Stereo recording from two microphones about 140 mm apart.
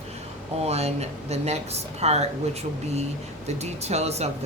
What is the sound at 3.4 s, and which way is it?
Speech, 50° right (ahead or behind).